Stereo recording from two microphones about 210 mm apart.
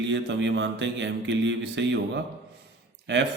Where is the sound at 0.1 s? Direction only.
60° right (ahead or behind).